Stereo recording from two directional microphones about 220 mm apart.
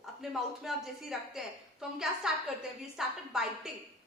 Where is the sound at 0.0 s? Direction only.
Centre (ahead or behind).